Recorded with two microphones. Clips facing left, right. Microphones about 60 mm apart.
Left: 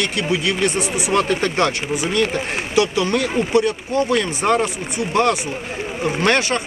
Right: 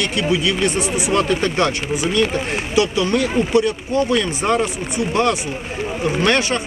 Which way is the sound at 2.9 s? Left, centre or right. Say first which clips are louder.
Right 1 dB; left.